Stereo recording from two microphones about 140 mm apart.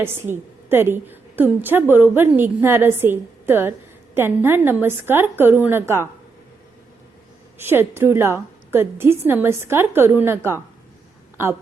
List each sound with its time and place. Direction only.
0.0 s a woman's voice: 15° right (ahead or behind)
7.6 s a woman's voice: 15° right (ahead or behind)